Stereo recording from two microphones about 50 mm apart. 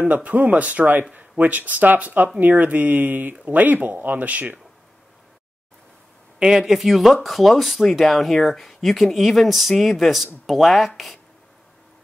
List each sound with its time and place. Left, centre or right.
0.1 s speech: right
6.4 s speech: centre